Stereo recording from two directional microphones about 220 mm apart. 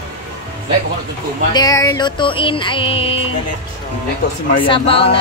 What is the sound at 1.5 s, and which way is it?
Music, 15° left (ahead or behind).